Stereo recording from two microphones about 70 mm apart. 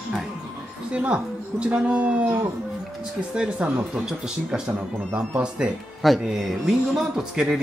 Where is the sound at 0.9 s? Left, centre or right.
Centre.